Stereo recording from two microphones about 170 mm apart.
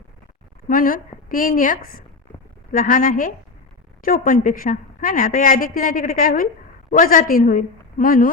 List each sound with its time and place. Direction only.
0.7 s a woman's voice: 55° left (ahead or behind)